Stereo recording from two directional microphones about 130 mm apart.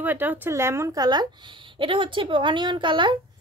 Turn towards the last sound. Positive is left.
turn(degrees=-40)  # may be behind; listen again after turning